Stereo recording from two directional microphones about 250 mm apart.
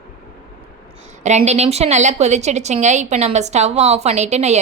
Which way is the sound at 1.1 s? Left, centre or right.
Right.